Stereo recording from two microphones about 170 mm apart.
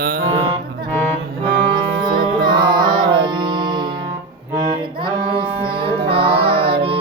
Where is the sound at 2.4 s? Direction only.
25° right (ahead or behind).